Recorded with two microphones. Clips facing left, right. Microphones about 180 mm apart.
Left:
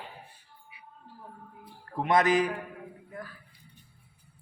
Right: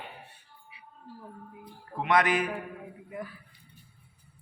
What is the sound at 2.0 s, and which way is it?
Speech, 45° left (ahead or behind).